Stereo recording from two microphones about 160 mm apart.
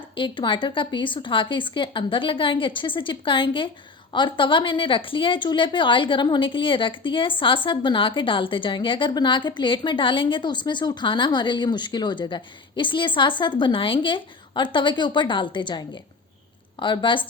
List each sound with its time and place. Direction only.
0.2 s speech: 30° left (ahead or behind)
16.8 s speech: 30° left (ahead or behind)